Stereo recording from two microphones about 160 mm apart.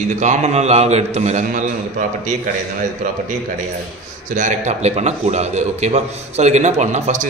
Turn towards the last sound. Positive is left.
turn(degrees=-45)  # may be behind; listen again after turning